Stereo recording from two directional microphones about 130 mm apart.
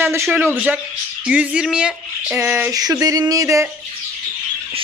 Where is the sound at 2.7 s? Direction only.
30° right (ahead or behind).